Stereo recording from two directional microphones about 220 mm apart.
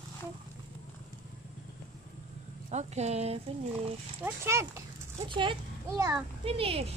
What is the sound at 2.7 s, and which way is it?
Speech, 30° right (ahead or behind).